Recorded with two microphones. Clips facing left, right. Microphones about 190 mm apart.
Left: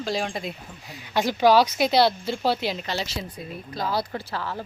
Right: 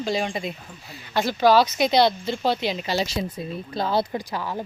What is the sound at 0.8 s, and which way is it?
Speech, 15° left (ahead or behind).